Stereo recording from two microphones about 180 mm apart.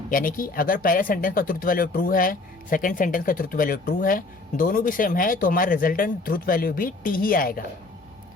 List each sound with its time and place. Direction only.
0.1 s speech: 50° left (ahead or behind)